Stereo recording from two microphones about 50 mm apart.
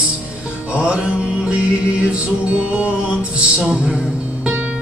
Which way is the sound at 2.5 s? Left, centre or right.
Right.